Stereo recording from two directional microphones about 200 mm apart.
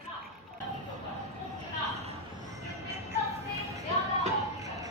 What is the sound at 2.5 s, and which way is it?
Music, 15° right (ahead or behind).